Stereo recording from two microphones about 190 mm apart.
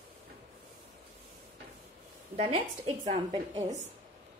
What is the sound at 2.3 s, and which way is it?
A woman's voice, 30° right (ahead or behind).